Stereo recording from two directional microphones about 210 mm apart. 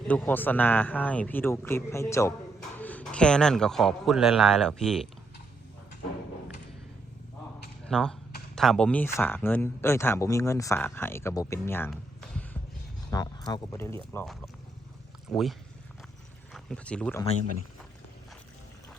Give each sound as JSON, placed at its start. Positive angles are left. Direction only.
{"t": 0.1, "sound": "a man's voice", "side_deg": 10}
{"t": 7.9, "sound": "speech", "side_deg": 5}
{"t": 13.1, "sound": "a sound", "side_deg": 20}
{"t": 13.5, "sound": "speech", "side_deg": 15}